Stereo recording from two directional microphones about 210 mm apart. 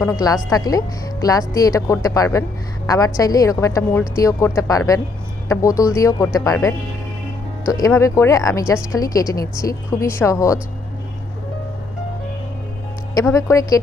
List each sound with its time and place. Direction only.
0.5 s a woman's voice: 15° left (ahead or behind)
13.1 s a woman's voice: 15° left (ahead or behind)